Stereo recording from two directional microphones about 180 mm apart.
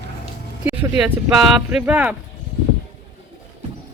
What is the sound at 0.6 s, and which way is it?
Speech, 10° right (ahead or behind).